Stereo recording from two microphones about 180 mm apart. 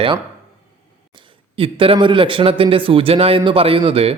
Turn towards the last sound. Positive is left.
turn(degrees=-30)  # may be behind; listen again after turning